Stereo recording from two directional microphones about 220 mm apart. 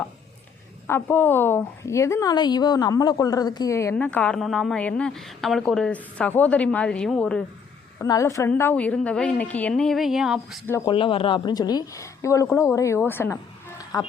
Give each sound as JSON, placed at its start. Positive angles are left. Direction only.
{"t": 0.9, "sound": "a woman's voice", "side_deg": 10}
{"t": 7.9, "sound": "a woman's voice", "side_deg": 15}
{"t": 10.7, "sound": "a woman's voice", "side_deg": 10}
{"t": 10.9, "sound": "a woman's voice", "side_deg": 25}